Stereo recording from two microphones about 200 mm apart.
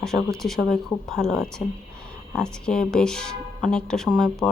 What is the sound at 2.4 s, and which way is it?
Speech, 5° left (ahead or behind).